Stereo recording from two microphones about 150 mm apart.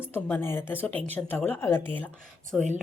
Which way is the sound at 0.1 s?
15° left (ahead or behind).